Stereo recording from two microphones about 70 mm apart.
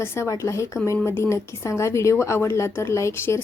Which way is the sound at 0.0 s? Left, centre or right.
Left.